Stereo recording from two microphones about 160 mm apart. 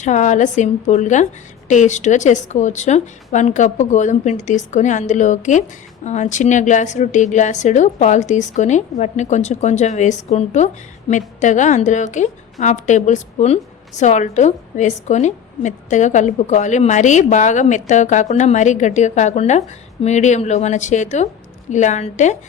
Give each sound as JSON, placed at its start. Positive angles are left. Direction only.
{"t": 0.0, "sound": "a woman's voice", "side_deg": 50}